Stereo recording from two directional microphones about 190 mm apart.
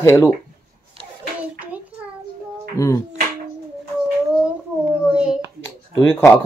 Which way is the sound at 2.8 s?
15° left (ahead or behind).